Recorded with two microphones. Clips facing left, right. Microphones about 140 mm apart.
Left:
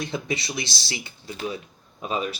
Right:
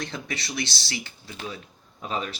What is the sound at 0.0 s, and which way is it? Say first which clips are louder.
Speech: left 5 dB; 15° left (ahead or behind).